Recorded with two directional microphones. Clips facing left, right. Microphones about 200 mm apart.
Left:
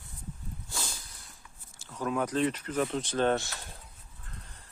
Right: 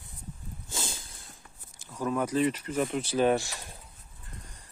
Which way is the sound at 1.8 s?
10° right (ahead or behind).